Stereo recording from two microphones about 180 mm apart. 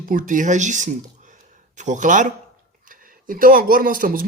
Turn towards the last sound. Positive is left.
turn(degrees=-50)  # may be behind; listen again after turning